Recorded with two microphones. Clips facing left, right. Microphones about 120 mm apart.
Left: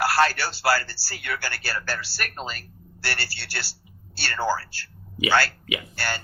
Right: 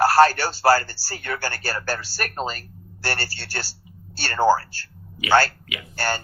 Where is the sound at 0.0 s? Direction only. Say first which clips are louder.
Right 6 dB; 45° right (ahead or behind).